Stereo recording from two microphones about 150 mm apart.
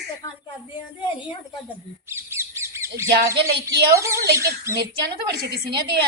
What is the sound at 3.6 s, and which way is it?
Speech, 20° right (ahead or behind).